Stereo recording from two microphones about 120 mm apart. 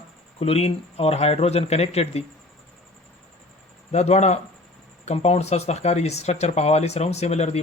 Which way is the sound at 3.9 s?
65° left (ahead or behind).